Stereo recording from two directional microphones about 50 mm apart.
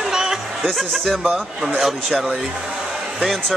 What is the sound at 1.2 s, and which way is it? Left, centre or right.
Speech, centre.